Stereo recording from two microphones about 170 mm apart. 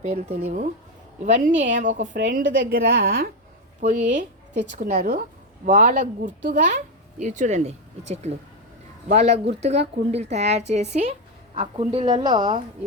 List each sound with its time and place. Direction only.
0.4 s a woman's voice: 45° right (ahead or behind); by 3.3 s 65° right (ahead or behind)
3.8 s speech: 45° right (ahead or behind)
12.2 s a woman's voice: 25° right (ahead or behind)